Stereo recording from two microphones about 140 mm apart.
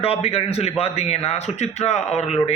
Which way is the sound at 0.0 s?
45° left (ahead or behind).